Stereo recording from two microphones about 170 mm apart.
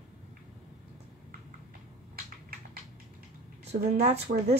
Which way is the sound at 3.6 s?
40° right (ahead or behind).